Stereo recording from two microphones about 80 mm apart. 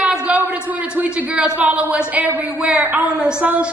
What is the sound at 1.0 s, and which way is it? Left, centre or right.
A woman's voice, centre.